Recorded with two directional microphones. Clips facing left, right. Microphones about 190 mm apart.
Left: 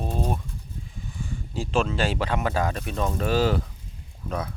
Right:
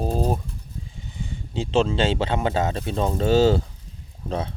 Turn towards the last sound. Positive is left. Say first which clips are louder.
# right 3 dB
turn(degrees=-30)  # may be behind; listen again after turning